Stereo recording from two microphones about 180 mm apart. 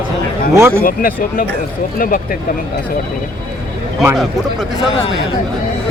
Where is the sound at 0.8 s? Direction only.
50° left (ahead or behind).